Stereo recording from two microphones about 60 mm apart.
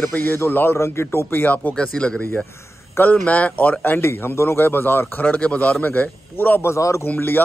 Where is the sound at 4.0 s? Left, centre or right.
Left.